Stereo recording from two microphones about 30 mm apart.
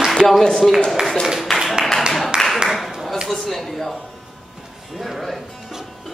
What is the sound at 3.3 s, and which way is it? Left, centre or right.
Speech, centre.